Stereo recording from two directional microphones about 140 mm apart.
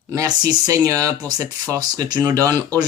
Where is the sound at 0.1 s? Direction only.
25° right (ahead or behind).